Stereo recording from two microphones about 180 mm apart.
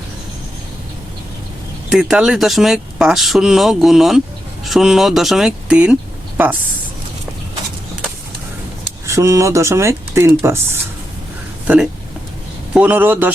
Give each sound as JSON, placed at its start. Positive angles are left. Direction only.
{"t": 1.9, "sound": "speech", "side_deg": -5}
{"t": 9.0, "sound": "speech", "side_deg": -15}
{"t": 12.7, "sound": "speech", "side_deg": -10}